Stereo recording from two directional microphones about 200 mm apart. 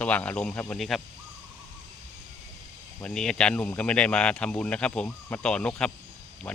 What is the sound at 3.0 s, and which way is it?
Speech, 5° left (ahead or behind).